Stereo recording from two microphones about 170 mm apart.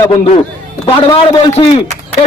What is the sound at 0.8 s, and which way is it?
Speech, 30° left (ahead or behind).